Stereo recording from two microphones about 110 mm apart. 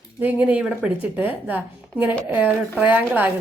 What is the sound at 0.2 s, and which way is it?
A woman's voice, 15° right (ahead or behind).